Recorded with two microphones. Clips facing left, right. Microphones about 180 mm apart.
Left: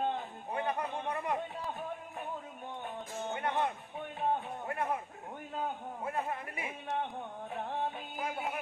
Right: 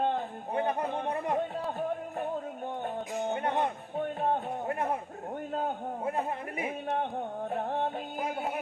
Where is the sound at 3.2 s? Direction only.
40° right (ahead or behind).